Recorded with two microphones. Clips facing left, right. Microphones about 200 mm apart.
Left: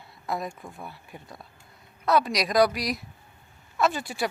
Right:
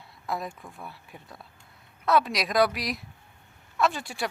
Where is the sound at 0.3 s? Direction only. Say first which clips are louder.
Left 2 dB; centre (ahead or behind).